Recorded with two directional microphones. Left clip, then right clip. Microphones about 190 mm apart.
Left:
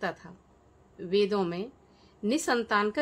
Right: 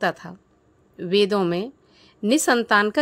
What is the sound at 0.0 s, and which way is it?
A woman's voice, 40° right (ahead or behind).